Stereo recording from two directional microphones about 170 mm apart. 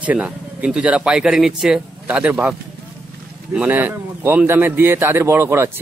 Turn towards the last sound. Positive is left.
turn(degrees=-15)  # may be behind; listen again after turning